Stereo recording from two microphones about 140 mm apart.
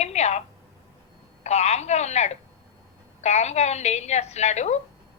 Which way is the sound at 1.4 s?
55° left (ahead or behind).